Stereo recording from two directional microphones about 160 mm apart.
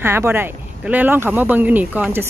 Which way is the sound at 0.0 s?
15° right (ahead or behind).